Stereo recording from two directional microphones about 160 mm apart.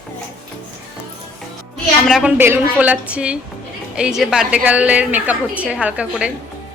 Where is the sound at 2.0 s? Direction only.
5° right (ahead or behind).